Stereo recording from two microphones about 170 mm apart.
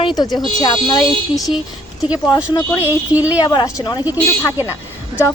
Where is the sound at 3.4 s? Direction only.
25° left (ahead or behind).